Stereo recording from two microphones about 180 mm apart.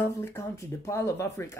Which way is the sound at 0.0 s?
15° left (ahead or behind).